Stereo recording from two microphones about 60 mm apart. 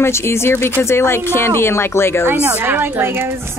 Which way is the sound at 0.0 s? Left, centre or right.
Left.